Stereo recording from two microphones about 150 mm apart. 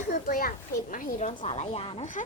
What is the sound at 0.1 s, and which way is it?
A child's voice, 75° left (ahead or behind).